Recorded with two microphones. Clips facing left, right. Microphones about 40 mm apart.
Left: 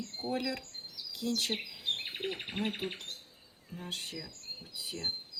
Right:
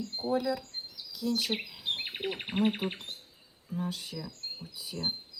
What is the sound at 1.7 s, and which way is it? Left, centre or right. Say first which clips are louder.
Bird: right 1 dB; right.